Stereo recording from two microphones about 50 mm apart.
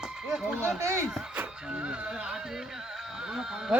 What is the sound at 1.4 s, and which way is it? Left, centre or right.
Music, right.